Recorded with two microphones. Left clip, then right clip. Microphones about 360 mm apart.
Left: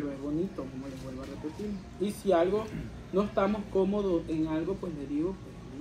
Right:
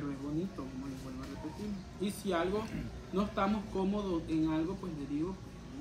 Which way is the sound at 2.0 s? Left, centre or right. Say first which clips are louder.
Left 8 dB; centre.